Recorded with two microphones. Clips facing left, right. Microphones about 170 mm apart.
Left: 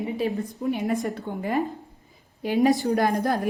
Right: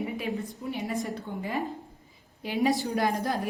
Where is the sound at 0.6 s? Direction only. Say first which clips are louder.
Left 12 dB; 45° left (ahead or behind).